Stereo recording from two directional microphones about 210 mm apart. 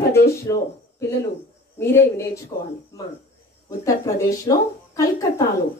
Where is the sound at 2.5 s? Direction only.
25° left (ahead or behind).